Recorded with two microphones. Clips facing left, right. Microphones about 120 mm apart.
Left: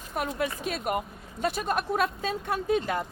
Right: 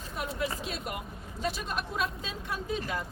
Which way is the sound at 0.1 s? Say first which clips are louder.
Left 4 dB; 55° left (ahead or behind).